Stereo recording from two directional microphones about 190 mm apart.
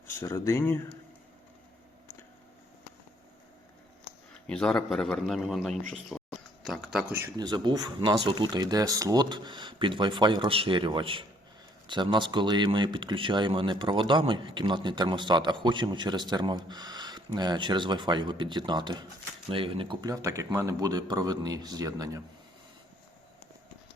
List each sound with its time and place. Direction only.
0.1 s speech: 15° left (ahead or behind)
4.4 s a man's voice: 5° left (ahead or behind)
5.9 s a sound: centre (ahead or behind)
7.1 s speech: 15° right (ahead or behind)